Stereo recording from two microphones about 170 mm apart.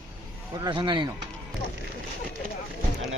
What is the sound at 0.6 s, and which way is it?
Speech, 25° right (ahead or behind).